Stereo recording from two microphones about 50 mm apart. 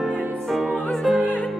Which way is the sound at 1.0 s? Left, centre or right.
Centre.